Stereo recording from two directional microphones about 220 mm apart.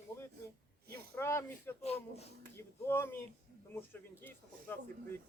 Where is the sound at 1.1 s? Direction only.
10° left (ahead or behind).